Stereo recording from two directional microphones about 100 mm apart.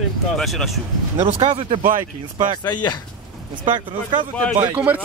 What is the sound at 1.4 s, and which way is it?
Speech, 75° right (ahead or behind).